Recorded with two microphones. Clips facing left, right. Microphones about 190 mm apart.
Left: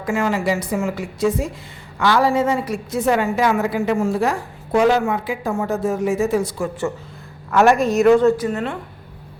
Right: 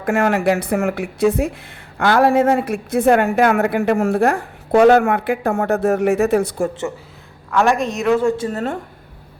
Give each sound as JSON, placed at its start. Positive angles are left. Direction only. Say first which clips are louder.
{"t": 0.0, "sound": "a woman's voice", "louder": "right 4 dB", "side_deg": -60}
{"t": 7.5, "sound": "a woman's voice", "louder": "left 3 dB", "side_deg": 5}
{"t": 8.4, "sound": "a woman's voice", "louder": "right 1 dB", "side_deg": -35}